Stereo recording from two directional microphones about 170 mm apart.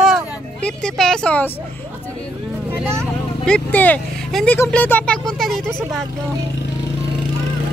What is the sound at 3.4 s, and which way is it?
Speech, 5° left (ahead or behind).